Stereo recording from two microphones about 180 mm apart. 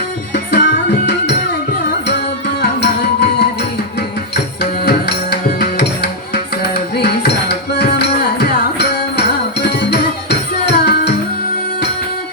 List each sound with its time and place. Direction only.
0.3 s music: 65° left (ahead or behind)
4.9 s music: 65° left (ahead or behind)